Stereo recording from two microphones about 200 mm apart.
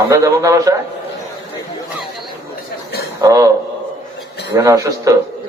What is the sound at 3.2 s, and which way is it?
Speech, 15° right (ahead or behind).